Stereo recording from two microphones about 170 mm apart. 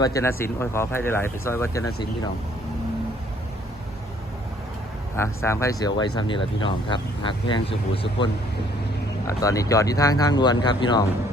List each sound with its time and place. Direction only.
0.0 s speech: 20° left (ahead or behind)
5.1 s speech: 15° left (ahead or behind); by 8.3 s 30° left (ahead or behind)
9.2 s speech: 20° left (ahead or behind)